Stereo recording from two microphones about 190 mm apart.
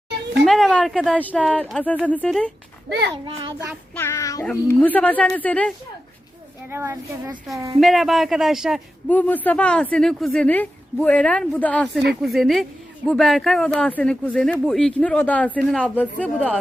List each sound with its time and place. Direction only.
0.4 s speech: centre (ahead or behind)
3.9 s speech: 15° left (ahead or behind)
6.7 s speech: 15° right (ahead or behind)
7.8 s speech: centre (ahead or behind)